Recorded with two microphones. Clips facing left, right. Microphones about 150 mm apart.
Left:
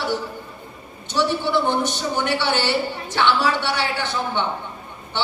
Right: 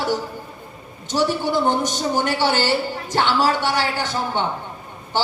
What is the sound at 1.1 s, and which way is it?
A woman's voice, 45° right (ahead or behind).